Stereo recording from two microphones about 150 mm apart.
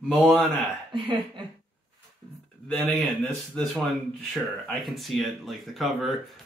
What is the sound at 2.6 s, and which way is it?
Speech, 5° left (ahead or behind).